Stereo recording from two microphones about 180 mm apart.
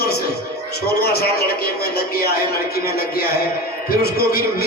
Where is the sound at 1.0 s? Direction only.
60° left (ahead or behind).